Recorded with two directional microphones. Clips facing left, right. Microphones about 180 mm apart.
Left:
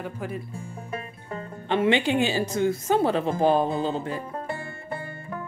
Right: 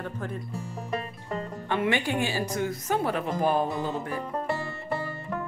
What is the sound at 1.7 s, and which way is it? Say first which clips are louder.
A woman's voice: left 5 dB; 25° left (ahead or behind).